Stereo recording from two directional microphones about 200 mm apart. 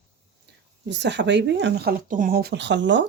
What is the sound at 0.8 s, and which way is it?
Speech, 60° right (ahead or behind).